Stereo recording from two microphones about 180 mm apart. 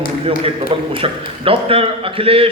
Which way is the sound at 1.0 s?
30° right (ahead or behind).